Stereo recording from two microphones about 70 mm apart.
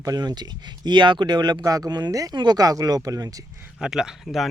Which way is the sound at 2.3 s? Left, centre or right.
Right.